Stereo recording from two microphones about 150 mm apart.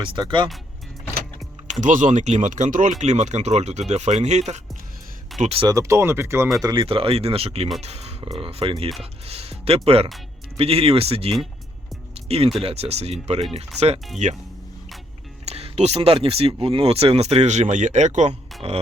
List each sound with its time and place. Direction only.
0.0 s speech: 35° right (ahead or behind)
1.8 s speech: 55° right (ahead or behind)
3.0 s speech: 50° right (ahead or behind)
5.6 s speech: 20° right (ahead or behind)
6.8 s speech: 40° right (ahead or behind)
15.4 s speech: 45° right (ahead or behind)